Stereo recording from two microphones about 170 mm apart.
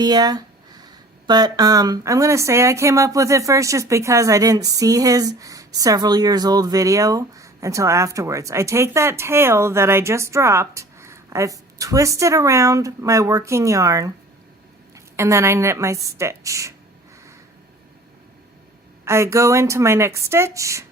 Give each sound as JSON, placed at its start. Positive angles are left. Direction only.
{"t": 0.0, "sound": "a woman's voice", "side_deg": -25}
{"t": 19.0, "sound": "a woman's voice", "side_deg": -15}